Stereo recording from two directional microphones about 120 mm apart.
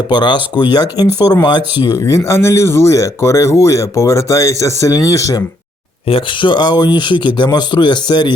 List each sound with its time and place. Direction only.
0.1 s speech: 40° left (ahead or behind)
6.1 s speech: 45° left (ahead or behind)